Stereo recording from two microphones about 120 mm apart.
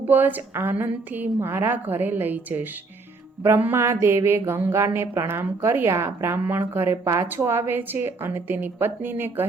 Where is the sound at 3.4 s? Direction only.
20° right (ahead or behind).